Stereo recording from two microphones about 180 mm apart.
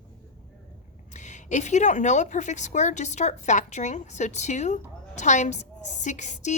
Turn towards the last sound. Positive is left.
turn(degrees=40)  # may be behind; listen again after turning